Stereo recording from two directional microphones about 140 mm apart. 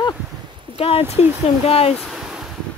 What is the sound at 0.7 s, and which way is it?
Speech, 45° left (ahead or behind).